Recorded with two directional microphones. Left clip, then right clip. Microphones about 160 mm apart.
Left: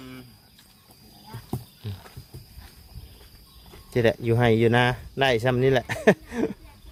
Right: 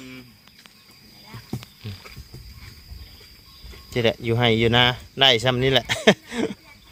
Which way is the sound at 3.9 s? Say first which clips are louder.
Even; 20° left (ahead or behind).